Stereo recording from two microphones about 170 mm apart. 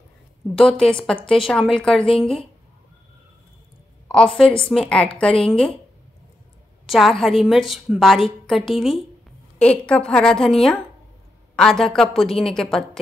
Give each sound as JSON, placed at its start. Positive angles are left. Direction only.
{"t": 0.6, "sound": "a woman's voice", "side_deg": 5}
{"t": 4.1, "sound": "a woman's voice", "side_deg": 5}
{"t": 6.9, "sound": "a woman's voice", "side_deg": 0}